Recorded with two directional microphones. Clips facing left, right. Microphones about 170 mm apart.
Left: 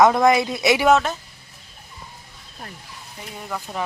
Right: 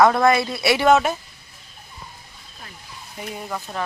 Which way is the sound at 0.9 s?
10° right (ahead or behind).